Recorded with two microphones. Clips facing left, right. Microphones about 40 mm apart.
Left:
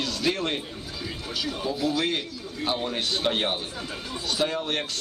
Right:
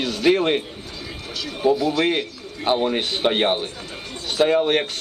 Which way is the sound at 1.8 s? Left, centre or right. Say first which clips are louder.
Right 5 dB; right.